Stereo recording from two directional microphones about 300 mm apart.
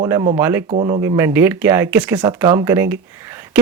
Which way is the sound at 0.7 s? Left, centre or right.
Centre.